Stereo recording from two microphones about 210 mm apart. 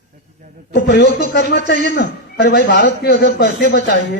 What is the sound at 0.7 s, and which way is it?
A man's voice, 55° left (ahead or behind).